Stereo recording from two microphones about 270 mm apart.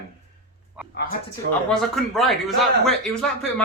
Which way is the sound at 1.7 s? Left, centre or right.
Centre.